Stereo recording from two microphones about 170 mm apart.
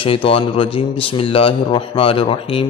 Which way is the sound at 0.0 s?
35° left (ahead or behind).